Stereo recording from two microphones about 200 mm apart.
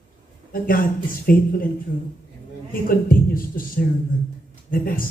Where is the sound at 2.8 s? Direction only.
45° left (ahead or behind).